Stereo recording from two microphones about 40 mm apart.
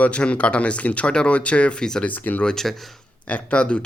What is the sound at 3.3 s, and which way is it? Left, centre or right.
Speech, left.